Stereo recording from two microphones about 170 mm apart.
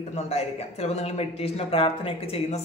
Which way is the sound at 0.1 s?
40° left (ahead or behind).